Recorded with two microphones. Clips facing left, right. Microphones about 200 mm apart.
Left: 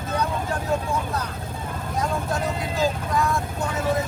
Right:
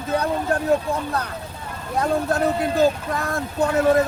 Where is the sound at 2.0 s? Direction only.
60° right (ahead or behind).